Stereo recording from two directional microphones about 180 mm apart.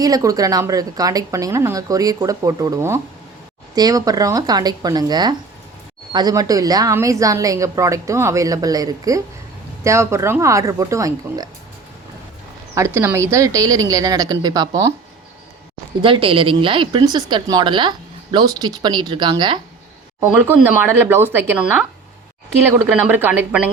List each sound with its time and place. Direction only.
0.0 s a woman's voice: 20° right (ahead or behind)
12.7 s a woman's voice: 15° right (ahead or behind)
16.0 s a woman's voice: 30° right (ahead or behind)
20.2 s speech: 10° right (ahead or behind)